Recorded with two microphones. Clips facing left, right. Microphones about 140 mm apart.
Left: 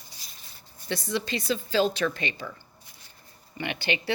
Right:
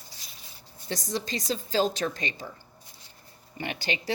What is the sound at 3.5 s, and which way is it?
Speech, 40° right (ahead or behind).